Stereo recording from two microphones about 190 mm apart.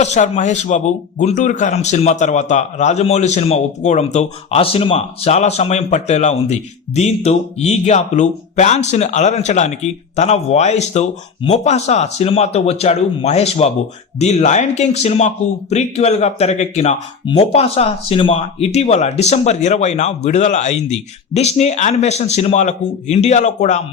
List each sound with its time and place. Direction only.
0.0 s speech: 35° left (ahead or behind)